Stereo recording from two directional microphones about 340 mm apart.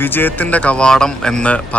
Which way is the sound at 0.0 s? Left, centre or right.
Centre.